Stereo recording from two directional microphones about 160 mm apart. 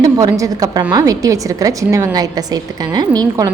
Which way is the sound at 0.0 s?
20° right (ahead or behind).